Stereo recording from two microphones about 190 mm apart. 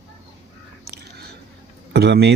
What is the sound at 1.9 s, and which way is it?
Speech, 60° right (ahead or behind).